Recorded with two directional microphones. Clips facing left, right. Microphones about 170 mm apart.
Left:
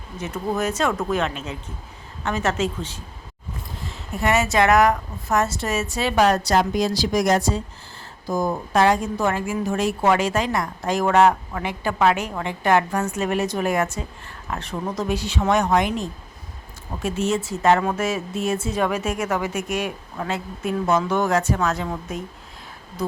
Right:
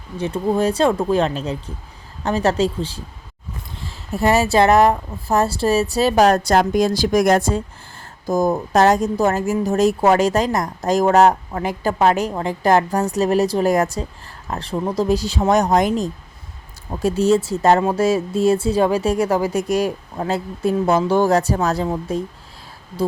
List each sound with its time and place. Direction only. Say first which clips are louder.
0.2 s speech: right 6 dB; 30° right (ahead or behind)